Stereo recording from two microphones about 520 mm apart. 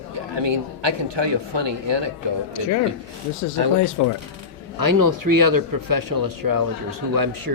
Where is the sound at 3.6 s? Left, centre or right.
Right.